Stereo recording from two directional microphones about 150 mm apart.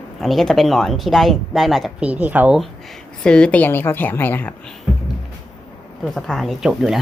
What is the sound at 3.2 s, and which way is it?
A woman's voice, 5° left (ahead or behind).